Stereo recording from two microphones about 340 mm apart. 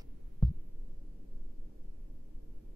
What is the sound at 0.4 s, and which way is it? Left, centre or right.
Heart sounds, centre.